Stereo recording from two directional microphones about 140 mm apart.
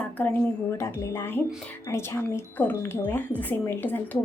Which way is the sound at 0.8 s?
15° left (ahead or behind).